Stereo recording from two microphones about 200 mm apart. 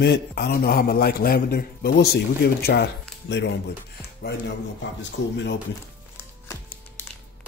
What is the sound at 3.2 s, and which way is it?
Speech, 60° left (ahead or behind).